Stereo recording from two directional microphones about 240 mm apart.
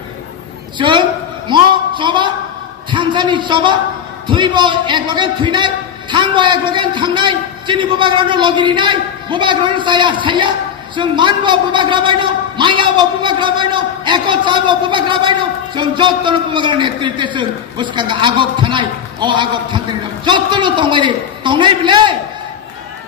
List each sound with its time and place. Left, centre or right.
0.7 s a man's voice: centre
1.5 s a sound: centre
2.9 s a man's voice: centre